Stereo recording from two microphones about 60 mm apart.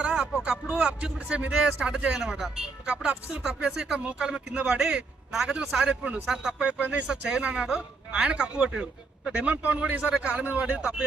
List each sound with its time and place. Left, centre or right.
0.0 s a man's voice: centre